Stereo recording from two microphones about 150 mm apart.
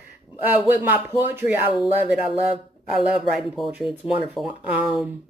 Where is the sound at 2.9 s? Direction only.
Centre (ahead or behind).